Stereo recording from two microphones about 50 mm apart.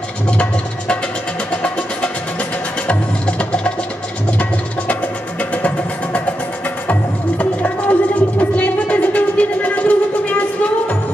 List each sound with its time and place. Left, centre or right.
0.3 s music: left
5.4 s vehicle: left
6.9 s music: left